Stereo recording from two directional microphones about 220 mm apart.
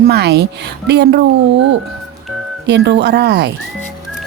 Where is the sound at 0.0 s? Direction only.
45° right (ahead or behind).